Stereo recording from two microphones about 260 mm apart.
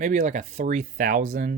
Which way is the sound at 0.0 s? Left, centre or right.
Right.